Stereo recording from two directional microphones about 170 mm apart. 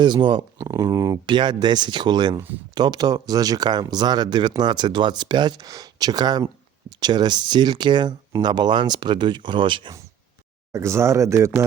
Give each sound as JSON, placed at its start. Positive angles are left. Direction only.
{"t": 0.0, "sound": "speech", "side_deg": -30}
{"t": 10.7, "sound": "speech", "side_deg": -15}